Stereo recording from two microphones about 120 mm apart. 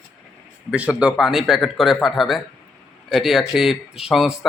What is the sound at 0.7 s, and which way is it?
Speech, 10° right (ahead or behind).